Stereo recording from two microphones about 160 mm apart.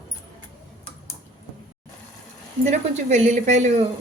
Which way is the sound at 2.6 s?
45° right (ahead or behind).